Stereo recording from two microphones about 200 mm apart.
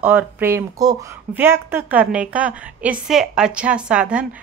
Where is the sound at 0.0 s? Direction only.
5° right (ahead or behind).